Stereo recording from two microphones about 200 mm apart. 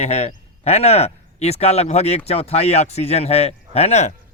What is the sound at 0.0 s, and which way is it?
Speech, 30° left (ahead or behind).